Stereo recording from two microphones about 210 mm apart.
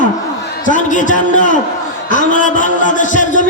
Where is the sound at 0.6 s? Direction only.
35° left (ahead or behind).